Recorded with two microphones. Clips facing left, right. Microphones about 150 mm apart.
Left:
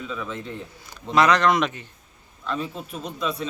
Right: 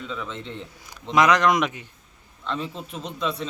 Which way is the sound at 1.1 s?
10° right (ahead or behind).